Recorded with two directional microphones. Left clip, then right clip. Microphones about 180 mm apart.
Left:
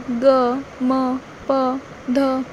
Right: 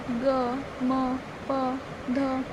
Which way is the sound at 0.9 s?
45° left (ahead or behind).